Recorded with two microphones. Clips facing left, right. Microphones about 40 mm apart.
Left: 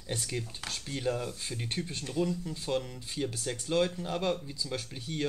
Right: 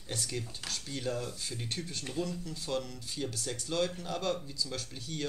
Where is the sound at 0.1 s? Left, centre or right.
Left.